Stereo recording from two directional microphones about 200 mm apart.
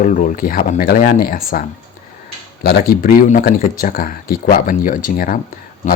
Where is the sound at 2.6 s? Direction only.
50° left (ahead or behind).